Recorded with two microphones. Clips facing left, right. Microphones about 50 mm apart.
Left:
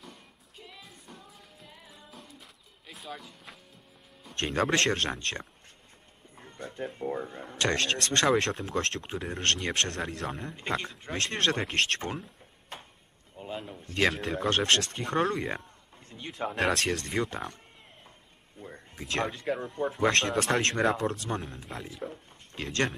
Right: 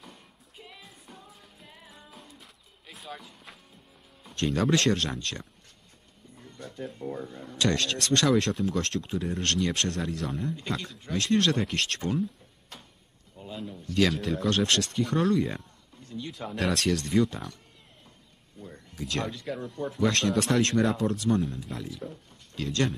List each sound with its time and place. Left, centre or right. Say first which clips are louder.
1.9 s music: even; centre
4.4 s a man's voice: right 1 dB; left
8.4 s speech: right 2 dB; left
8.6 s a man's voice: right 2 dB; left
12.7 s a sound: left 4 dB; left
14.2 s speech: right 1 dB; left
14.5 s a man's voice: left 1 dB; left
18.6 s a sound: right 3 dB; left
19.3 s a man's voice: left 3 dB; left
20.8 s speech: even; left
21.1 s a man's voice: right 7 dB; left